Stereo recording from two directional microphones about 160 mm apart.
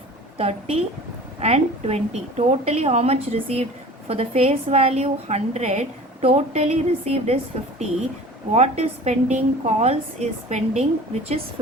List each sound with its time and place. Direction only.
0.3 s a woman's voice: 40° right (ahead or behind)